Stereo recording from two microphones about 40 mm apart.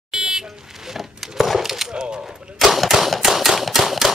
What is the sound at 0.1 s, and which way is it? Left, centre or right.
Vehicle, centre.